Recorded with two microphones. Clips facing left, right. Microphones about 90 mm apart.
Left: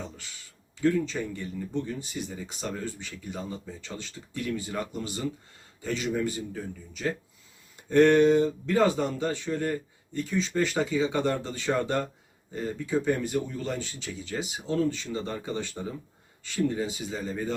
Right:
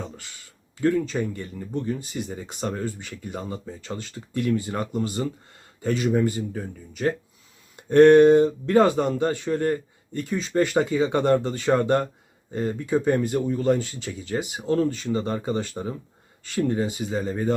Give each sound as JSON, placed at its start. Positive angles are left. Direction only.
{"t": 0.8, "sound": "speech", "side_deg": -45}